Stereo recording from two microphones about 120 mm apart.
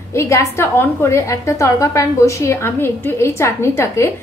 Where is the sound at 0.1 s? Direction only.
25° left (ahead or behind).